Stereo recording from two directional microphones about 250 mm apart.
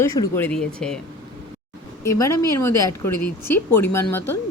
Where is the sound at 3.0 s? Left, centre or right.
Left.